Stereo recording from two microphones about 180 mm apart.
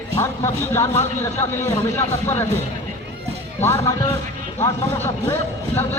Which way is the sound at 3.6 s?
15° left (ahead or behind).